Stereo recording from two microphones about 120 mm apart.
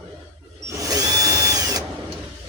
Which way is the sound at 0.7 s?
30° right (ahead or behind).